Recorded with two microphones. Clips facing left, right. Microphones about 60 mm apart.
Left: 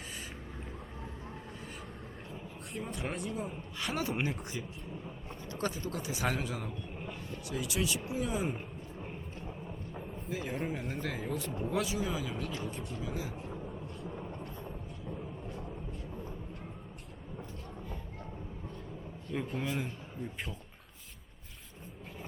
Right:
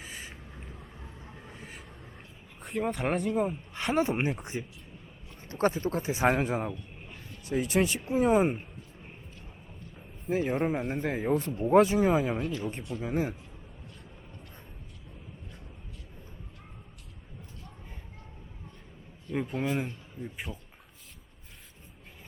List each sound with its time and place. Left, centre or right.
2.7 s speech: right
3.2 s speech: right
10.2 s speech: right
19.3 s speech: right
20.2 s speech: centre